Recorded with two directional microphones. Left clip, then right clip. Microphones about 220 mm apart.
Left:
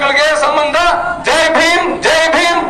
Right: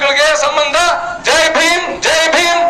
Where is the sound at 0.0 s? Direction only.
35° right (ahead or behind).